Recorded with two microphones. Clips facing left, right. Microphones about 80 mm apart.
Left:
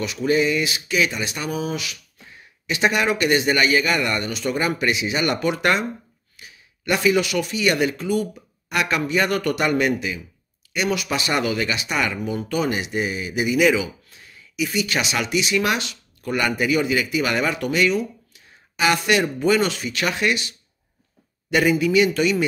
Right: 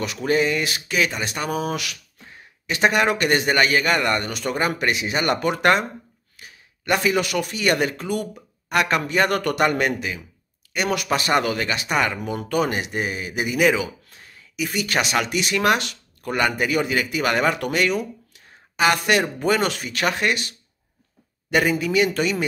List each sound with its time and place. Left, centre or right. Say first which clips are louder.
0.0 s a man's voice: left 1 dB; right
2.6 s a man's voice: right 1 dB; right
12.2 s a man's voice: right 1 dB; right